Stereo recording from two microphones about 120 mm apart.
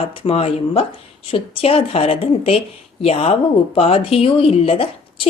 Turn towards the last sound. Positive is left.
turn(degrees=55)  # may be behind; listen again after turning